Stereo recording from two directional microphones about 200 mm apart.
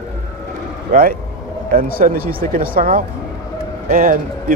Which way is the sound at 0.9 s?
45° right (ahead or behind).